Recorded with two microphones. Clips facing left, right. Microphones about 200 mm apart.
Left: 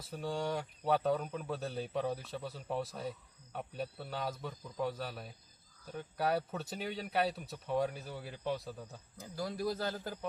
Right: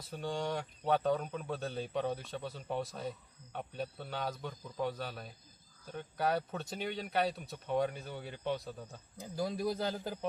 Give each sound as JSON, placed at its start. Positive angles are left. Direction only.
{"t": 0.1, "sound": "speech", "side_deg": 5}
{"t": 9.1, "sound": "speech", "side_deg": -15}